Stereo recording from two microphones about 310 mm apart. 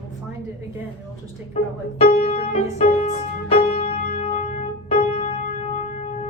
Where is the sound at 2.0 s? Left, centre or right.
Left.